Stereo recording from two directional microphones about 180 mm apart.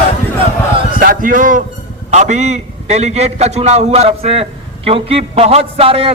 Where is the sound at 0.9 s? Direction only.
50° right (ahead or behind).